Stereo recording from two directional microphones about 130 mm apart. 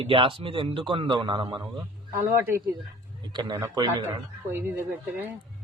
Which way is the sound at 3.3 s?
35° right (ahead or behind).